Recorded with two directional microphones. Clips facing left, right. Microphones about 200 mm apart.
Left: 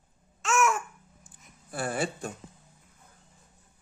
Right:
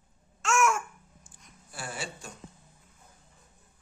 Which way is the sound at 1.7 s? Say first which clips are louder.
Left 9 dB; 55° left (ahead or behind).